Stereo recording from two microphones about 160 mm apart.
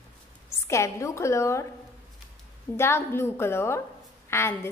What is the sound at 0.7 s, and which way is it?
A woman's voice, 20° left (ahead or behind).